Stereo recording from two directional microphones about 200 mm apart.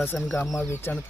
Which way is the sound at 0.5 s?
10° left (ahead or behind).